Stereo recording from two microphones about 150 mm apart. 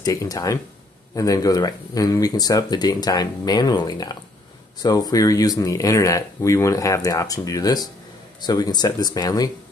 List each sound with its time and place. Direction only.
0.0 s speech: 25° left (ahead or behind)